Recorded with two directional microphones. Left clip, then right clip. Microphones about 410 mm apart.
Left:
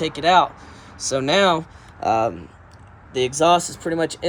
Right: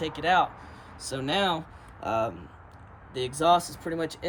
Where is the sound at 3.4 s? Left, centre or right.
Centre.